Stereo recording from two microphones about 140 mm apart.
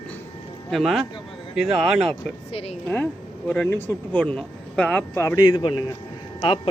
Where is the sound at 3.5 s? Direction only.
15° left (ahead or behind).